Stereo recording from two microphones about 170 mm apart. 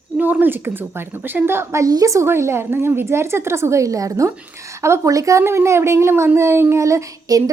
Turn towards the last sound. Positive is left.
turn(degrees=-15)  # may be behind; listen again after turning